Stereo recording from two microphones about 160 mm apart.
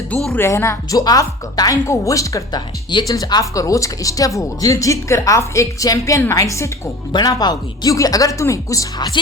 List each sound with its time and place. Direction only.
0.1 s speech: centre (ahead or behind)
0.3 s a woman's voice: 15° left (ahead or behind)